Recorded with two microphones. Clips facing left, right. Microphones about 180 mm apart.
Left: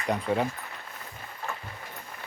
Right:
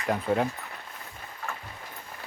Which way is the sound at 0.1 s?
Centre (ahead or behind).